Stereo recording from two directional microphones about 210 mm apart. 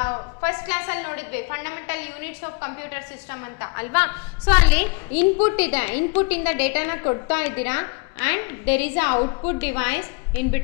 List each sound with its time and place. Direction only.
0.0 s a woman's voice: 10° left (ahead or behind)